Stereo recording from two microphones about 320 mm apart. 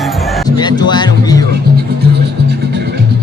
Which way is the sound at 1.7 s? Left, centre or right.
Right.